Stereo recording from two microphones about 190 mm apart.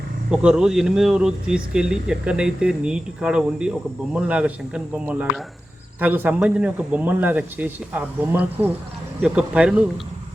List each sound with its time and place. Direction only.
0.3 s speech: 5° right (ahead or behind)